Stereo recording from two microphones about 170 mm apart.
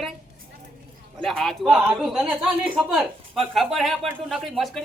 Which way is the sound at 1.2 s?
Centre (ahead or behind).